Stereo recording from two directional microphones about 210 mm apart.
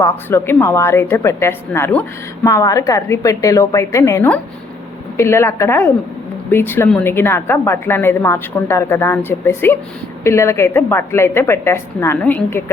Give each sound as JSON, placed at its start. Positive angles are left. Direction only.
{"t": 0.0, "sound": "a woman's voice", "side_deg": 10}